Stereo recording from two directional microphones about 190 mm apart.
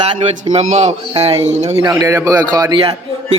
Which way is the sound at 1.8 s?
20° right (ahead or behind).